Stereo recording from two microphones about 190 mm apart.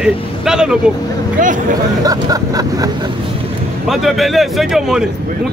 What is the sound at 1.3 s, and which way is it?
Speech, 45° right (ahead or behind).